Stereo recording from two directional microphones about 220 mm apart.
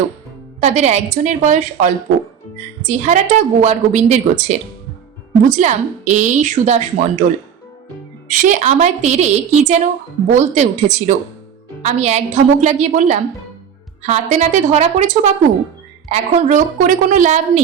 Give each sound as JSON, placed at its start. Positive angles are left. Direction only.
{"t": 0.6, "sound": "speech", "side_deg": -30}
{"t": 8.3, "sound": "speech", "side_deg": -35}